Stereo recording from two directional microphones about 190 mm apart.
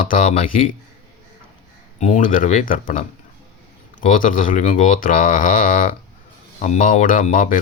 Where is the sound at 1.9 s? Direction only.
40° left (ahead or behind).